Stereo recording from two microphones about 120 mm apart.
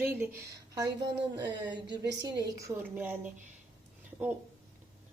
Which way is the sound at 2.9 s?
10° right (ahead or behind).